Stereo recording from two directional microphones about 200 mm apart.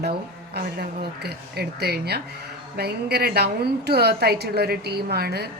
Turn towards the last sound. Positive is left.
turn(degrees=-50)  # may be behind; listen again after turning